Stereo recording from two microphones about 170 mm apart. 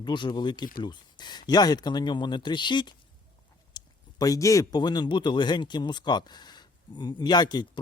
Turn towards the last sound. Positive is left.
turn(degrees=25)  # may be behind; listen again after turning